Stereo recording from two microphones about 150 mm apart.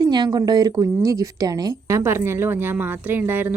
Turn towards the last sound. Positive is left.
turn(degrees=-15)  # may be behind; listen again after turning